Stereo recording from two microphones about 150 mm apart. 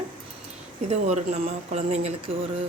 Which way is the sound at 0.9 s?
50° right (ahead or behind).